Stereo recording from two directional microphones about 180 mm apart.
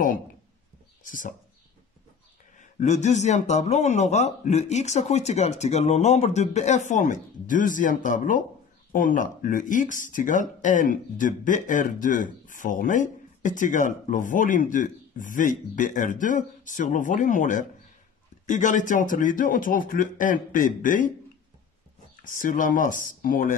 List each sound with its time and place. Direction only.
1.0 s speech: 45° left (ahead or behind)
2.6 s speech: 40° left (ahead or behind)
22.2 s speech: 50° left (ahead or behind)